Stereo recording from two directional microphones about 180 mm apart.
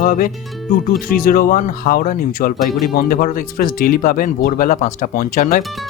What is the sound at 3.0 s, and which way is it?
Speech, 55° left (ahead or behind).